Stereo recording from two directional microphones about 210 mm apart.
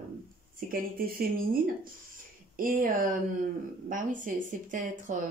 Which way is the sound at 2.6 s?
40° right (ahead or behind).